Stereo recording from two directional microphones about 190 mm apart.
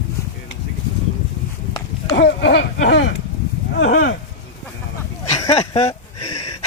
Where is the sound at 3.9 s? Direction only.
55° left (ahead or behind).